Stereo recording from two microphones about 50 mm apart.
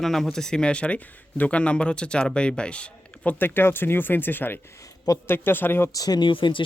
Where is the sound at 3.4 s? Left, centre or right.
Left.